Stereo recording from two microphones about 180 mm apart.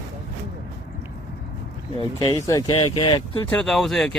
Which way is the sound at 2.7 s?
30° left (ahead or behind).